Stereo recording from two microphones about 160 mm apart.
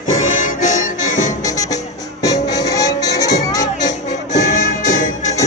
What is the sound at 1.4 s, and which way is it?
Music, 20° left (ahead or behind).